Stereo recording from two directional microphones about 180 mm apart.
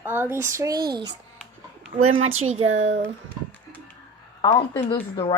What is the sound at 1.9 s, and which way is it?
Speech, 35° right (ahead or behind).